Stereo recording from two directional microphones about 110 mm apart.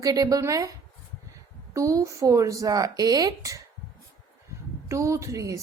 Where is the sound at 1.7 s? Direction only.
30° right (ahead or behind).